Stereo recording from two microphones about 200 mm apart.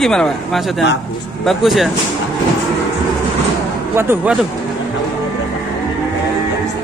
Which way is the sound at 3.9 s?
10° right (ahead or behind).